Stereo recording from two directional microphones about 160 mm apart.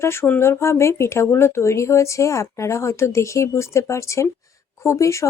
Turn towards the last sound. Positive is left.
turn(degrees=20)  # may be behind; listen again after turning